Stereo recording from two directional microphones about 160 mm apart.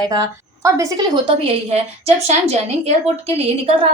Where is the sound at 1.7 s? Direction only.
40° right (ahead or behind).